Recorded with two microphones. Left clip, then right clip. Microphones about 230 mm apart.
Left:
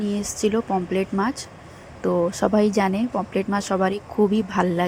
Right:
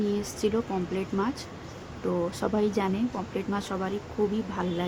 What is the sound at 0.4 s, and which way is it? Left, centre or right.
Speech, left.